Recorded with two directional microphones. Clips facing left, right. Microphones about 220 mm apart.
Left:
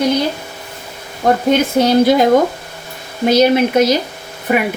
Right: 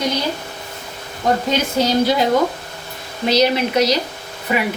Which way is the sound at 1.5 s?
55° left (ahead or behind).